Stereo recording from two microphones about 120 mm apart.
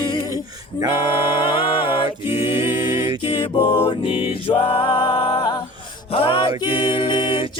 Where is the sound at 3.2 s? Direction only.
45° left (ahead or behind).